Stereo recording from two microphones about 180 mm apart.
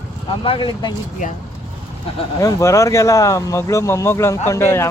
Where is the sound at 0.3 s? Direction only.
30° left (ahead or behind).